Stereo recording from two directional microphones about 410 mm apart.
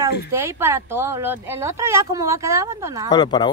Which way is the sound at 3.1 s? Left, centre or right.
Centre.